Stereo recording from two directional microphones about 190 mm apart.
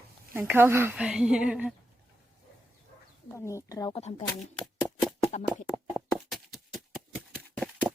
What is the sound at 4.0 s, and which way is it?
Speech, 35° left (ahead or behind).